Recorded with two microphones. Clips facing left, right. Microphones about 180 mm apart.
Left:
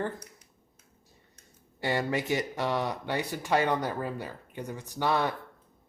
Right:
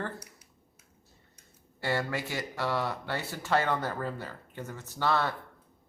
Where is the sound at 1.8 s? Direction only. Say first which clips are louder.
Left 2 dB; 15° left (ahead or behind).